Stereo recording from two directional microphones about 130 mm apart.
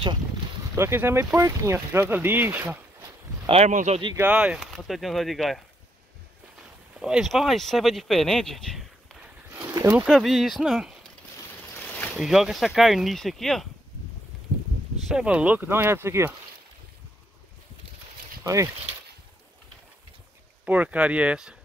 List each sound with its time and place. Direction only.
0.7 s speech: 20° right (ahead or behind)
3.4 s speech: 55° right (ahead or behind)
4.2 s speech: 10° right (ahead or behind)
7.0 s speech: 5° right (ahead or behind)
9.5 s a sound: 25° right (ahead or behind)
10.0 s speech: centre (ahead or behind)
12.2 s speech: 5° right (ahead or behind)
15.0 s speech: 5° right (ahead or behind)
18.4 s speech: 25° right (ahead or behind)
20.6 s speech: 10° right (ahead or behind)